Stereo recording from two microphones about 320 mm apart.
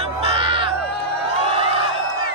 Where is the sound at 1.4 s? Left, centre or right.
Centre.